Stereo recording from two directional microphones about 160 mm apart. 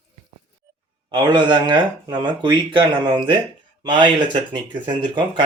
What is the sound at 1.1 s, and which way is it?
Speech, 30° right (ahead or behind).